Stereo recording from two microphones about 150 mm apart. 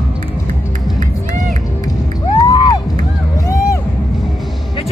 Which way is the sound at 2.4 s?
30° left (ahead or behind).